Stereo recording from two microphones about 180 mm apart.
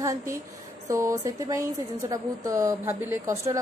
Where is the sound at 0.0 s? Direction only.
20° right (ahead or behind).